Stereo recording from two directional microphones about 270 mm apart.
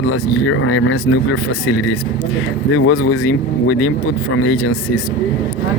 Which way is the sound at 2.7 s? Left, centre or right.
Left.